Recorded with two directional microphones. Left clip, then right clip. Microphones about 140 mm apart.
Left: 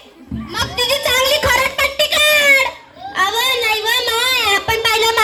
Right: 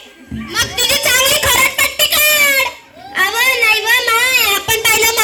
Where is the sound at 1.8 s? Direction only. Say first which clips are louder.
Right 1 dB; 90° right.